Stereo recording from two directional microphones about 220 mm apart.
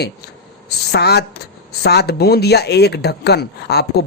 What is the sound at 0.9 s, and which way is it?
Speech, 50° left (ahead or behind).